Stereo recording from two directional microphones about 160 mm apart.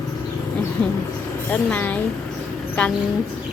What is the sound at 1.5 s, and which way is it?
Speech, 10° left (ahead or behind).